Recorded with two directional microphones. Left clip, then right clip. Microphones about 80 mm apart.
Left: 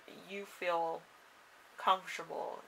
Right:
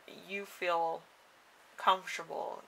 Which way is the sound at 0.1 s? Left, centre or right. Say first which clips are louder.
Right 4 dB; right.